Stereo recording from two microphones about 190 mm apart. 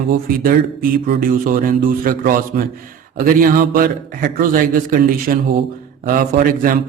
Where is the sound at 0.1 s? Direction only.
50° right (ahead or behind).